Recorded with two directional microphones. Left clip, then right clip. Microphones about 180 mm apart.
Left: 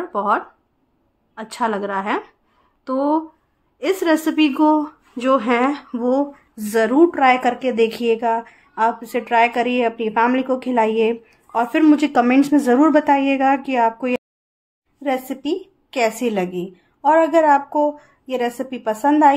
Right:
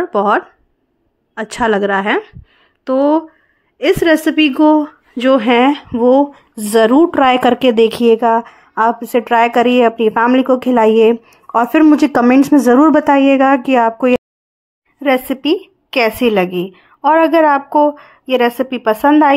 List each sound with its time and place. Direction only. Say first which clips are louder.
0.1 s a woman's voice: right 4 dB; 40° right (ahead or behind)
7.2 s a woman's voice: right 5 dB; 50° right (ahead or behind); by 19.3 s 25° right (ahead or behind)